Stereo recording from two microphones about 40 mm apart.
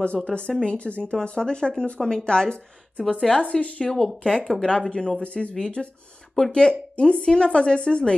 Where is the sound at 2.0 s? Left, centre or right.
Centre.